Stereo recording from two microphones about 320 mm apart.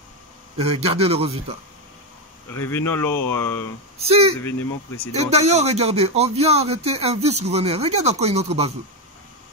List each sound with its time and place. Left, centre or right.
0.6 s speech: centre
2.5 s speech: centre
4.0 s speech: centre